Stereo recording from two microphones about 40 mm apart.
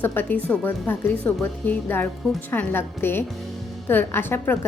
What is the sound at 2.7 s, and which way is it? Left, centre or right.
Speech, left.